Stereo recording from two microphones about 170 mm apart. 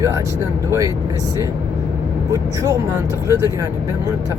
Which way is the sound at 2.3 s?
20° right (ahead or behind).